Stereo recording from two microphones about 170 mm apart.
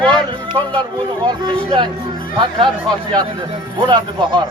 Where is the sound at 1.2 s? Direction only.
25° right (ahead or behind).